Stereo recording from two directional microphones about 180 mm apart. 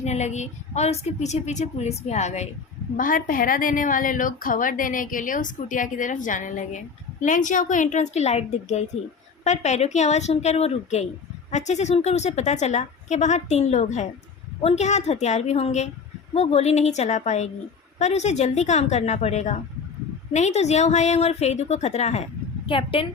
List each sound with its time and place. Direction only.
0.0 s a woman's voice: 40° left (ahead or behind)
3.0 s a woman's voice: 50° left (ahead or behind); by 23.0 s 30° left (ahead or behind)